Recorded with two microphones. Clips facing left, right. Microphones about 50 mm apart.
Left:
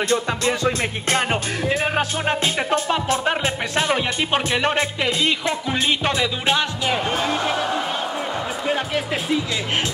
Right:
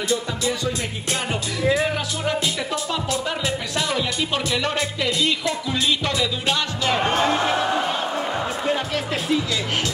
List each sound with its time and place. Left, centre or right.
0.1 s music: left
8.6 s speech: centre